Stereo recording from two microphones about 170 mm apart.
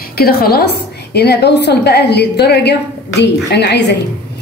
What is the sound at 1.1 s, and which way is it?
A woman's voice, 75° left (ahead or behind).